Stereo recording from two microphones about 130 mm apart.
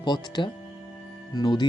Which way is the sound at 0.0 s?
35° left (ahead or behind).